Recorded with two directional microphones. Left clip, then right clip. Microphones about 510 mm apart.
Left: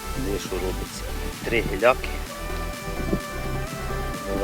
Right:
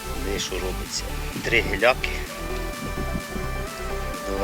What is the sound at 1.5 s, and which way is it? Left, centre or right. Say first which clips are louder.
Speech: even; centre.